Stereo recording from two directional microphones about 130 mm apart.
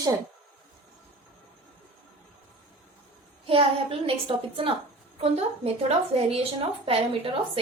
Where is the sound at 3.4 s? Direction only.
45° right (ahead or behind).